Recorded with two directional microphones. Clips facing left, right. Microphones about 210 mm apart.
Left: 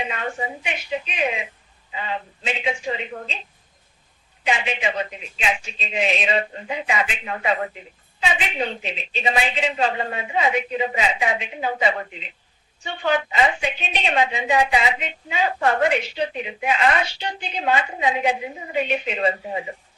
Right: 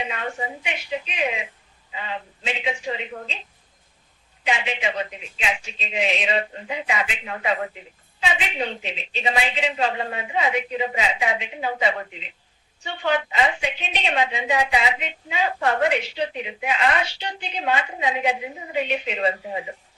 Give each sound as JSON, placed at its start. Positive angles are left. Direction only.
{"t": 0.1, "sound": "a woman's voice", "side_deg": 45}
{"t": 4.4, "sound": "a woman's voice", "side_deg": 50}